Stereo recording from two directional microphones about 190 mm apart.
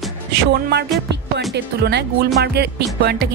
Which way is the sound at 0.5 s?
60° right (ahead or behind).